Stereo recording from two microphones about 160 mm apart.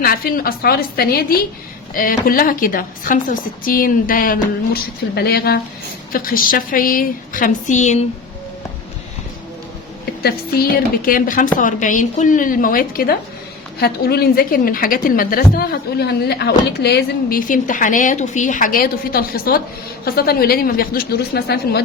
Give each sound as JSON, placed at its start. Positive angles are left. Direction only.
{"t": 0.0, "sound": "a woman's voice", "side_deg": 65}
{"t": 6.1, "sound": "a woman's voice", "side_deg": 60}
{"t": 10.2, "sound": "a woman's voice", "side_deg": 70}
{"t": 13.7, "sound": "a woman's voice", "side_deg": 80}